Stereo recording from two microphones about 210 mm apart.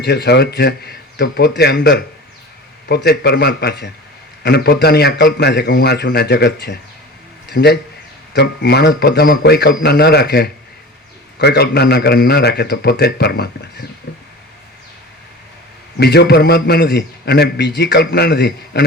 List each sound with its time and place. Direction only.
0.0 s a man's voice: 50° left (ahead or behind)
16.0 s a man's voice: 50° left (ahead or behind)